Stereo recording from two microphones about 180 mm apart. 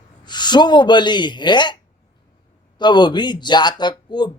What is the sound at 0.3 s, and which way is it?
Speech, 25° left (ahead or behind).